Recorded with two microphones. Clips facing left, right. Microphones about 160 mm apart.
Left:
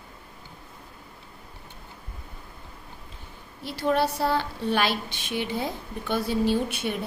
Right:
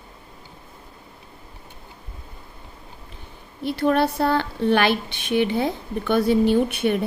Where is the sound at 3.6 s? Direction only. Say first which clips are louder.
Right 5 dB; 60° right (ahead or behind).